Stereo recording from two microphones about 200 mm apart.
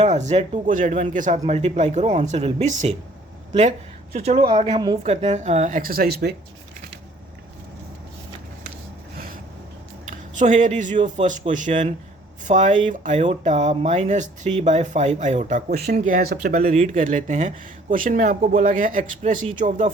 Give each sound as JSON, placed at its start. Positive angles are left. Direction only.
{"t": 0.0, "sound": "speech", "side_deg": -35}
{"t": 5.0, "sound": "speech", "side_deg": -30}
{"t": 10.1, "sound": "speech", "side_deg": -40}